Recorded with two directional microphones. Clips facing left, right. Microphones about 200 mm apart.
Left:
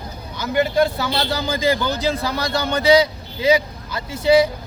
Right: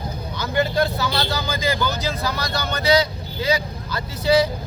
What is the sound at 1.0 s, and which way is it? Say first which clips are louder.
A man's voice: left 2 dB; 30° left (ahead or behind).